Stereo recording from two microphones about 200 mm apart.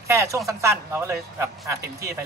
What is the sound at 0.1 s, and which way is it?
Speech, 15° right (ahead or behind).